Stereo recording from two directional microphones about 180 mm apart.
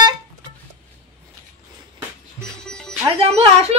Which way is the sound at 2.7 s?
5° left (ahead or behind).